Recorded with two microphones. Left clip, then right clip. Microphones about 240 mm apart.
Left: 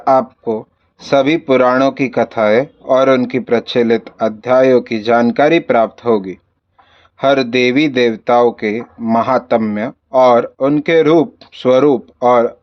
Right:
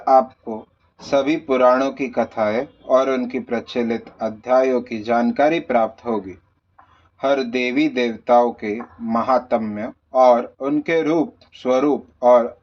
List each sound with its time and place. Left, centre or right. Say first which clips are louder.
0.0 s speech: left 3 dB; left